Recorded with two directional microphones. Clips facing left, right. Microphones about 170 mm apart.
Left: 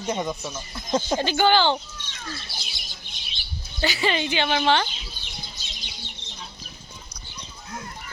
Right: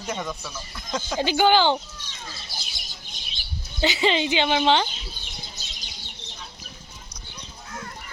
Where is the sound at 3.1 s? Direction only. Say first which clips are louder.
Right 1 dB; 45° right (ahead or behind).